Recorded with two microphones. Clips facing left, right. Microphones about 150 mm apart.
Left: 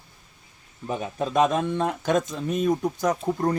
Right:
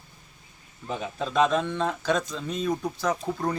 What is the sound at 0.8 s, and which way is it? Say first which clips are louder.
Speech: left 3 dB; 15° left (ahead or behind).